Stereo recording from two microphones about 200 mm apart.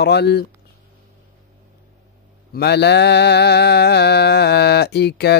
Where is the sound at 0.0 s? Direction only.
55° left (ahead or behind).